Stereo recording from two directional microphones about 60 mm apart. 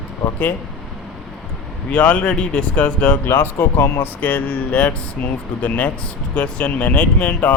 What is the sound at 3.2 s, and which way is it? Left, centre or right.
Speech, left.